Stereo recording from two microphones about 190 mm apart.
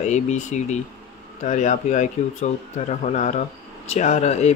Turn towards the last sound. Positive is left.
turn(degrees=35)  # may be behind; listen again after turning